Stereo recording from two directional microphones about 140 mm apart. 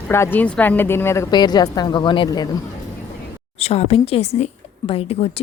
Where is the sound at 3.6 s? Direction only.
45° left (ahead or behind).